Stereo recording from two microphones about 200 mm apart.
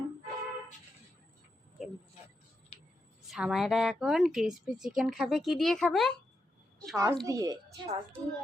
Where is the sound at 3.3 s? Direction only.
Centre (ahead or behind).